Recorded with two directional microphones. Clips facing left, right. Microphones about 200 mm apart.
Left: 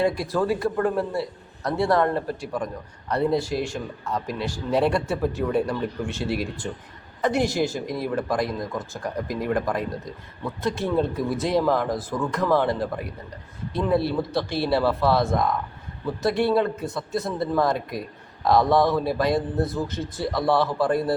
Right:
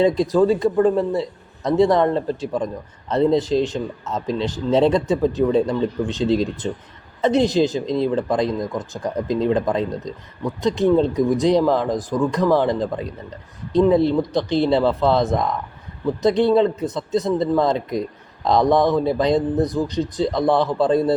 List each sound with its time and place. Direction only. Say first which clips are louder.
0.0 s speech: right 7 dB; 20° right (ahead or behind)